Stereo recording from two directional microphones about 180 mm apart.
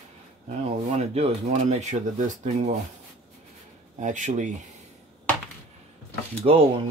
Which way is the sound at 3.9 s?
45° right (ahead or behind).